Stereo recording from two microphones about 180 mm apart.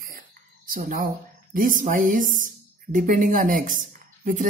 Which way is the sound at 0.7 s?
50° right (ahead or behind).